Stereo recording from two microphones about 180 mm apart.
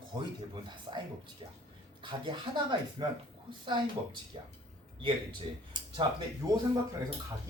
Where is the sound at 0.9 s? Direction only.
30° right (ahead or behind).